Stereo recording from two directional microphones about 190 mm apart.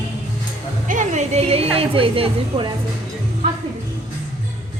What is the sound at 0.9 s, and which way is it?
A woman's voice, 40° right (ahead or behind).